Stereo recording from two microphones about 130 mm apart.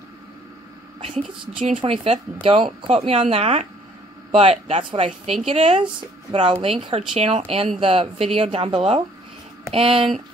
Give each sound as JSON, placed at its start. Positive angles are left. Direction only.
{"t": 1.8, "sound": "speech", "side_deg": -40}